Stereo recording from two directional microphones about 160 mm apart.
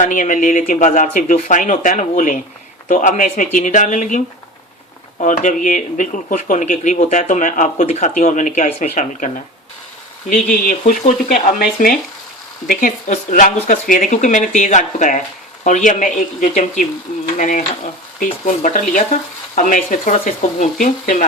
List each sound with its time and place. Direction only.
0.0 s speech: 55° left (ahead or behind)
5.2 s speech: 55° left (ahead or behind)